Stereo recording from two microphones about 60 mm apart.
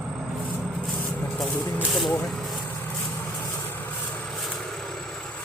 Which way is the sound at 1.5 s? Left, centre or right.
Left.